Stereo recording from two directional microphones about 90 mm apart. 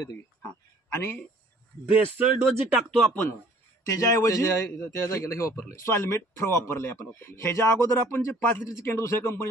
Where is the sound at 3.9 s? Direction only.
35° left (ahead or behind).